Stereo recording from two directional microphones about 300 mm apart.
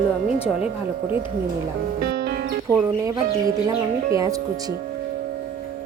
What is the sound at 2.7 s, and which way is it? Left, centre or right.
Speech, centre.